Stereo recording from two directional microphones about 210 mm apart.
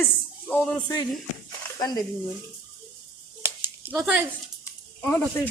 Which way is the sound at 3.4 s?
10° right (ahead or behind).